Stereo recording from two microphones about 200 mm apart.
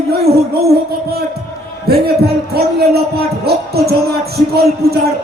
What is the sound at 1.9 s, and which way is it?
Speech, 55° right (ahead or behind).